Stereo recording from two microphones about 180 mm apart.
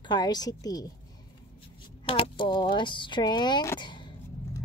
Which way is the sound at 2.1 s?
30° left (ahead or behind).